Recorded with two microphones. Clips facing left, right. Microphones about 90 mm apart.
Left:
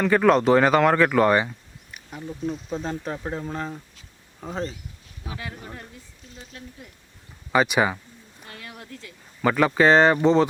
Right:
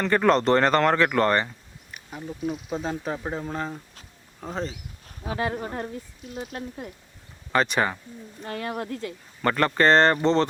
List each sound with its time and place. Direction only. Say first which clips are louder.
0.0 s speech: left 2 dB; 5° left (ahead or behind)
5.0 s speech: right 9 dB; 45° right (ahead or behind)
7.5 s speech: left 2 dB; 10° left (ahead or behind)
8.4 s speech: right 11 dB; 50° right (ahead or behind)
9.4 s speech: left 2 dB; 5° left (ahead or behind)